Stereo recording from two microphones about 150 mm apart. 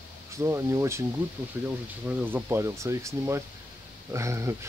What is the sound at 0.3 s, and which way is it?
Speech, 20° right (ahead or behind).